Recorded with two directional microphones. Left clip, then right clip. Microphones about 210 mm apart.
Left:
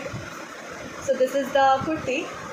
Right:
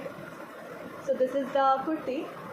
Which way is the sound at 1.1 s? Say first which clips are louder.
Left 5 dB; 35° left (ahead or behind).